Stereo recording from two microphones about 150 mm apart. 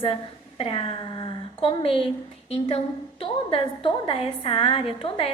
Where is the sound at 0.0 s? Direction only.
35° left (ahead or behind).